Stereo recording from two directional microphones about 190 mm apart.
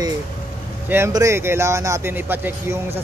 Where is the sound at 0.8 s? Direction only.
15° right (ahead or behind).